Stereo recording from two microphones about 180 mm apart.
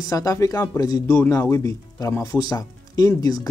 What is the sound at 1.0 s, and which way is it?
Speech, 10° left (ahead or behind).